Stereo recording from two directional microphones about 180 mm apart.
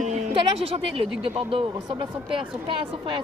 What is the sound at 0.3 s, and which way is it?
A woman's voice, 30° right (ahead or behind).